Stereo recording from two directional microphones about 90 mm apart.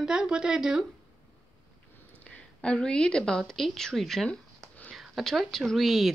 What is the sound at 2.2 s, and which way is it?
A woman's voice, 10° left (ahead or behind).